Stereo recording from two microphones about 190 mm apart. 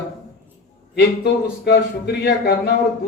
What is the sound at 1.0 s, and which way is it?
A man's voice, 60° left (ahead or behind).